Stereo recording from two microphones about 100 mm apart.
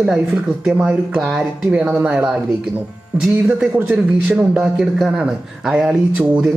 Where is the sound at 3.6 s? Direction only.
10° right (ahead or behind).